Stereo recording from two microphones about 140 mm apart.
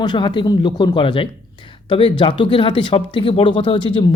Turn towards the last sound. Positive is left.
turn(degrees=35)  # may be behind; listen again after turning